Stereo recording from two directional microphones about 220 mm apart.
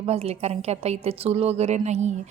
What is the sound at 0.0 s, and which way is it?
A woman's voice, 25° right (ahead or behind).